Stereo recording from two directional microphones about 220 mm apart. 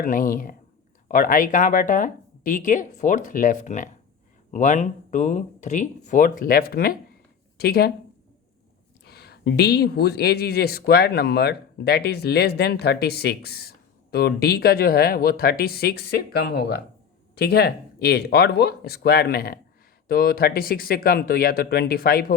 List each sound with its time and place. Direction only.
0.0 s speech: 40° left (ahead or behind)
9.0 s speech: 45° left (ahead or behind)